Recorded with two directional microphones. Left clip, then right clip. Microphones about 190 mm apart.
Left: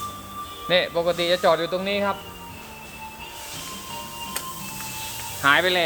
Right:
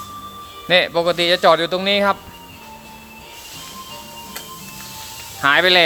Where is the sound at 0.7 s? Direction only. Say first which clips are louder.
Right 5 dB; 35° right (ahead or behind).